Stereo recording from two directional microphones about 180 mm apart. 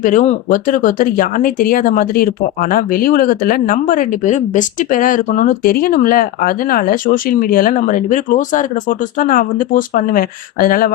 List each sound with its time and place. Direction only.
0.0 s speech: 45° left (ahead or behind)